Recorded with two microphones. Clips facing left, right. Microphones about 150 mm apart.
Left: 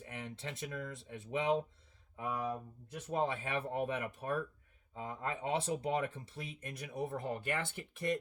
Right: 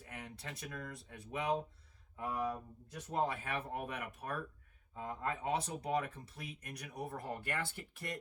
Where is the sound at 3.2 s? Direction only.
25° left (ahead or behind).